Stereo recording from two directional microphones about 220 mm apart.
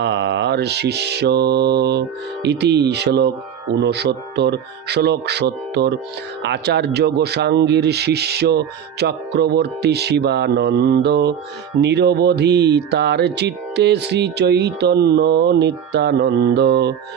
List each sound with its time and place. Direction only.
0.0 s speech: 50° right (ahead or behind)